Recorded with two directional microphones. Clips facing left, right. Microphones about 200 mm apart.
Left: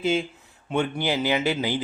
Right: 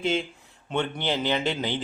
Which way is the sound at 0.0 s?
5° left (ahead or behind).